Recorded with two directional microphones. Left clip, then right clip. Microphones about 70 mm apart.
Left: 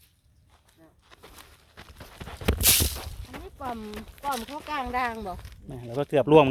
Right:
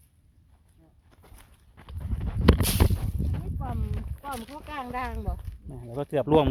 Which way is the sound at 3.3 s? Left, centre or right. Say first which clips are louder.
Left 2 dB; left.